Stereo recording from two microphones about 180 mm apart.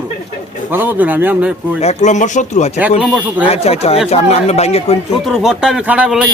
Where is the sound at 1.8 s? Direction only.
40° left (ahead or behind).